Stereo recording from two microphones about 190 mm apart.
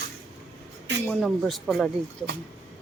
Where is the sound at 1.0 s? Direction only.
Centre (ahead or behind).